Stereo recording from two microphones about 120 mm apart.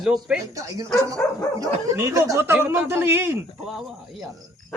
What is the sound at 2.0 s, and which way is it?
Speech, 25° right (ahead or behind).